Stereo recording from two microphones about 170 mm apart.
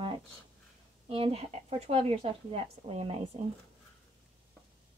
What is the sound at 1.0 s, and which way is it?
Speech, 35° right (ahead or behind).